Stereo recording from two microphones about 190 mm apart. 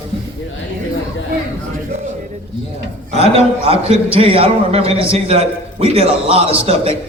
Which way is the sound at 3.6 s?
30° right (ahead or behind).